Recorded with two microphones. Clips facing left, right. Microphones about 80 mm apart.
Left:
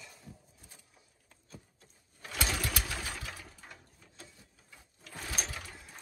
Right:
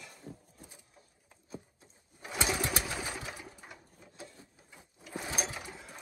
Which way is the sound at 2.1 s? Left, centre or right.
Centre.